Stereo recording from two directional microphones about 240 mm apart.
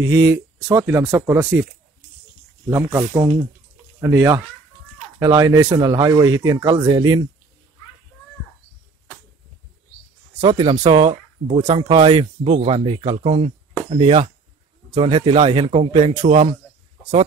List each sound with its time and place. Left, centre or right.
0.0 s speech: centre
2.7 s speech: centre
10.4 s speech: right